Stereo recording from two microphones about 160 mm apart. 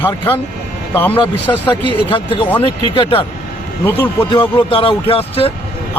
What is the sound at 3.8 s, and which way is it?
Speech, 10° left (ahead or behind).